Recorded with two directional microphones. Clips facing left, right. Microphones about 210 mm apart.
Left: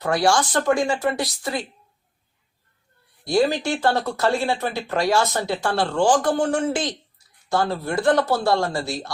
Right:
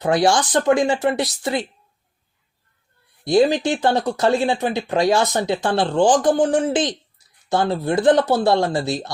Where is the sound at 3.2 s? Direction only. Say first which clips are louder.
Right 4 dB; 20° right (ahead or behind).